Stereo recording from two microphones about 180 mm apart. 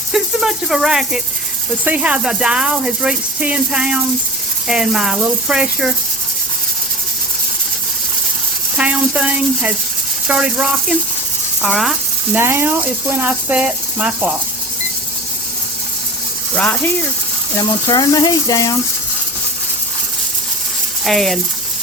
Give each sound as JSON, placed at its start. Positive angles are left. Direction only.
{"t": 0.1, "sound": "speech", "side_deg": 0}
{"t": 8.8, "sound": "speech", "side_deg": -5}
{"t": 12.4, "sound": "speech", "side_deg": -15}
{"t": 16.6, "sound": "speech", "side_deg": 10}
{"t": 17.6, "sound": "speech", "side_deg": 20}
{"t": 21.0, "sound": "speech", "side_deg": 0}